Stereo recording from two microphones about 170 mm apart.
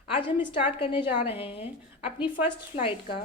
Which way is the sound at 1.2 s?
35° left (ahead or behind).